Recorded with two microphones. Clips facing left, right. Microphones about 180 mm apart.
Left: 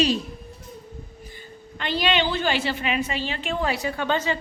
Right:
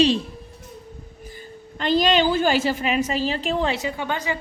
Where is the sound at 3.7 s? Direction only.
20° right (ahead or behind).